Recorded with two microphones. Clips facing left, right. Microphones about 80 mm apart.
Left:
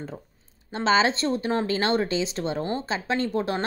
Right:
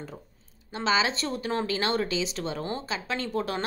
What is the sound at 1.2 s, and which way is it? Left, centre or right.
A woman's voice, left.